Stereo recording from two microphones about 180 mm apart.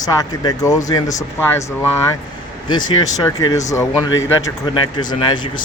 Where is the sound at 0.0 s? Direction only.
20° left (ahead or behind).